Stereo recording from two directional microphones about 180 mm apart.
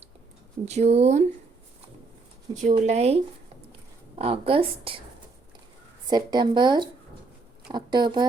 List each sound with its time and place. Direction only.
0.6 s speech: 35° right (ahead or behind)
2.6 s speech: 40° right (ahead or behind)
6.1 s speech: 25° right (ahead or behind)